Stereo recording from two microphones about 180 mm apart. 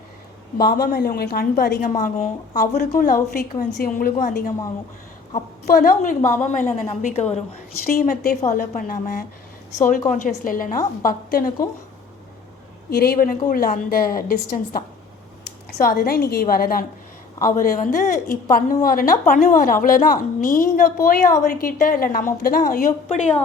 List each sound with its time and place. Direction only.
0.6 s a woman's voice: 60° left (ahead or behind)
5.6 s a woman's voice: 55° left (ahead or behind); by 7.4 s 35° left (ahead or behind)
7.9 s a woman's voice: 50° left (ahead or behind)
12.9 s a woman's voice: 60° left (ahead or behind)
23.0 s a woman's voice: 40° left (ahead or behind)